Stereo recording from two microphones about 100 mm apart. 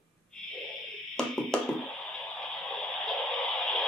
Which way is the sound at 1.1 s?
5° left (ahead or behind).